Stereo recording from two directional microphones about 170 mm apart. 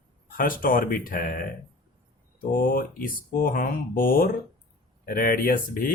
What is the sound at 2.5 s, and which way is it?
Speech, 55° left (ahead or behind).